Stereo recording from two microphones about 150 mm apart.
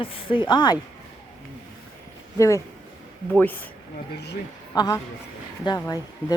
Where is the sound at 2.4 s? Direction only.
20° left (ahead or behind).